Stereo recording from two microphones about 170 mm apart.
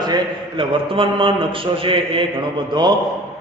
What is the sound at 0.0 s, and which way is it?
A man's voice, 25° right (ahead or behind).